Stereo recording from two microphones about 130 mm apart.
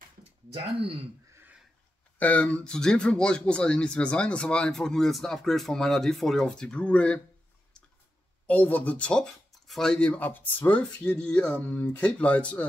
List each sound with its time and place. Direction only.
0.5 s speech: 45° right (ahead or behind)
1.3 s a sound: 15° right (ahead or behind)
2.1 s speech: 10° left (ahead or behind)
8.5 s speech: 15° left (ahead or behind)